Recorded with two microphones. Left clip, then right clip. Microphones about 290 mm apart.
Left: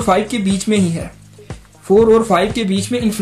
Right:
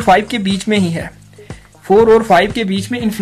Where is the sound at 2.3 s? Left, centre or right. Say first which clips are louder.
Right 4 dB; right.